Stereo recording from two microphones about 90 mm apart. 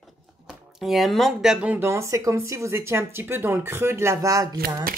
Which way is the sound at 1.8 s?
30° right (ahead or behind).